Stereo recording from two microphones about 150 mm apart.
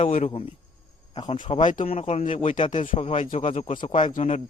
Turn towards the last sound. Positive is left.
turn(degrees=50)  # may be behind; listen again after turning